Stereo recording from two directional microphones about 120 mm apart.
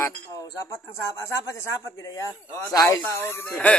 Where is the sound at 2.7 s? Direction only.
30° left (ahead or behind).